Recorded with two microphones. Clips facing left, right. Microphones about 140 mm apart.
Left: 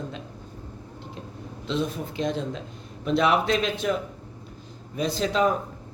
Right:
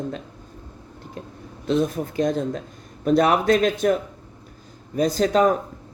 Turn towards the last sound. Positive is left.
turn(degrees=-45)  # may be behind; listen again after turning